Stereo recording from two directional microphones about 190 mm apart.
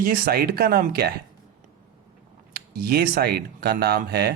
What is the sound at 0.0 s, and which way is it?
Speech, 50° right (ahead or behind).